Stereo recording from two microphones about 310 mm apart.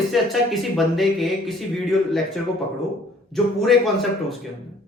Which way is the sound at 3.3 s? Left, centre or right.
Centre.